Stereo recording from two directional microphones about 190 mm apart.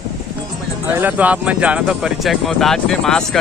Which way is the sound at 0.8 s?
10° right (ahead or behind).